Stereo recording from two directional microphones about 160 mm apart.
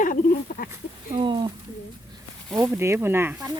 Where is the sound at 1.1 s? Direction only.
30° right (ahead or behind).